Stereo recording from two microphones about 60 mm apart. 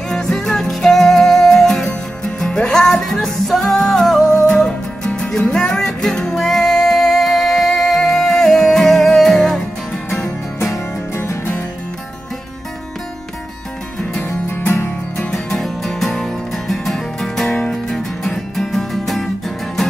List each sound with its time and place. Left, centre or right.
0.1 s music: centre
4.2 s music: left
4.5 s music: centre
10.6 s music: left
14.2 s music: left
15.1 s music: centre